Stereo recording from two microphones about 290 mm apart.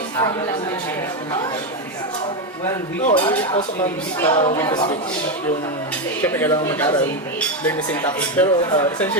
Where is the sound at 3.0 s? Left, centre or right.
Left.